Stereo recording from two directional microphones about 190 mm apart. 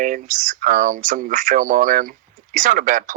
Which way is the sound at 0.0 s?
45° right (ahead or behind).